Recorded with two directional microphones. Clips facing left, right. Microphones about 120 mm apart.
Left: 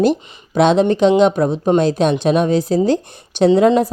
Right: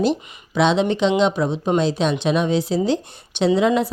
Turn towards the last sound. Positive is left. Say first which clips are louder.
# left 5 dB
turn(degrees=45)  # may be behind; listen again after turning